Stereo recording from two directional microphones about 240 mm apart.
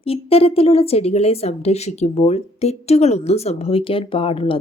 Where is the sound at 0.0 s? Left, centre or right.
Left.